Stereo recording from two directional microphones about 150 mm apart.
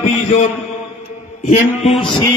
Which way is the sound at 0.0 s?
45° left (ahead or behind).